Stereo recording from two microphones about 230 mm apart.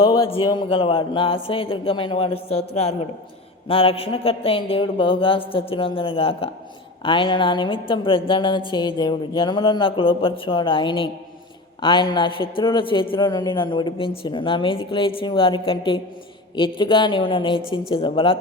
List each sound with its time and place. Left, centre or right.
0.0 s a man's voice: left